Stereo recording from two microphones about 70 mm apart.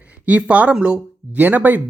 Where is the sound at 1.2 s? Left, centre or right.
Right.